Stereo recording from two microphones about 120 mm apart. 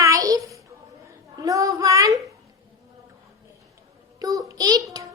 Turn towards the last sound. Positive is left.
turn(degrees=-30)  # may be behind; listen again after turning